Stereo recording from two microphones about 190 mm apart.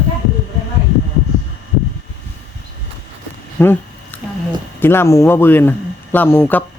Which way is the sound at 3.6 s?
10° left (ahead or behind).